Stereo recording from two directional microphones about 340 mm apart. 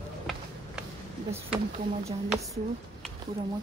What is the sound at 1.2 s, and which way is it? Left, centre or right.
Speech, centre.